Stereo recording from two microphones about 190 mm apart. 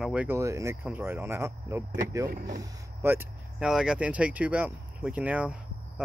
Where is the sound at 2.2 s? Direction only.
45° right (ahead or behind).